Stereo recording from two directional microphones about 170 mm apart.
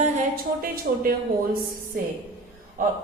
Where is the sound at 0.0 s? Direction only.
50° right (ahead or behind).